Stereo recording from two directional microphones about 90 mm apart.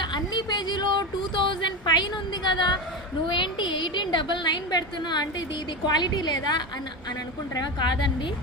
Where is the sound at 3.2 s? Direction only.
60° left (ahead or behind).